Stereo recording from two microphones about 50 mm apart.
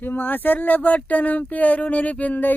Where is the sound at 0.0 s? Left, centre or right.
Left.